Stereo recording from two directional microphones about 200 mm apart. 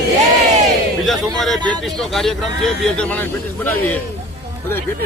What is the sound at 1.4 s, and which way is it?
Speech, 5° left (ahead or behind).